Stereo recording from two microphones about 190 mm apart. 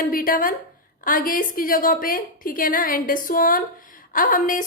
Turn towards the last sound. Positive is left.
turn(degrees=45)  # may be behind; listen again after turning